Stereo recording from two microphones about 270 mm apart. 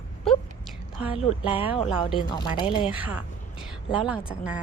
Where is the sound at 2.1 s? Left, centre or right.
Centre.